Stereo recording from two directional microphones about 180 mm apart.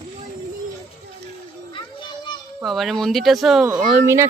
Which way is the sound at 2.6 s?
Centre (ahead or behind).